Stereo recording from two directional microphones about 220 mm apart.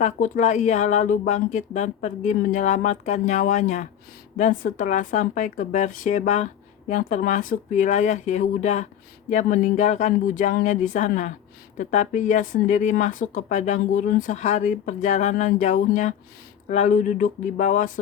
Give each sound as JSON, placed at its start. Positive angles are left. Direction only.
{"t": 0.0, "sound": "speech", "side_deg": 35}